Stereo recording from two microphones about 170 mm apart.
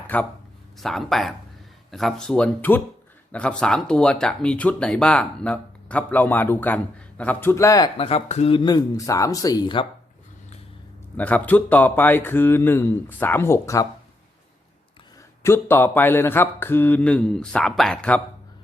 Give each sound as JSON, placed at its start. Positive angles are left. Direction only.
{"t": 0.1, "sound": "speech", "side_deg": 10}
{"t": 7.9, "sound": "speech", "side_deg": 35}
{"t": 11.2, "sound": "speech", "side_deg": 10}
{"t": 15.4, "sound": "speech", "side_deg": 15}